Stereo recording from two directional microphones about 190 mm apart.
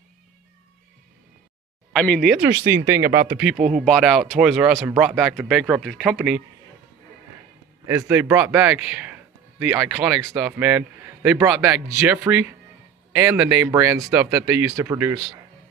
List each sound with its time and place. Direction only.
1.9 s speech: 5° left (ahead or behind)
2.3 s a man's voice: 10° right (ahead or behind)
7.8 s a man's voice: 15° right (ahead or behind)
10.3 s a man's voice: 10° right (ahead or behind)